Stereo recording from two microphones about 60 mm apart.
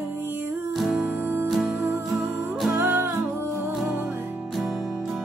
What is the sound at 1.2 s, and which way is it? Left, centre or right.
Music, right.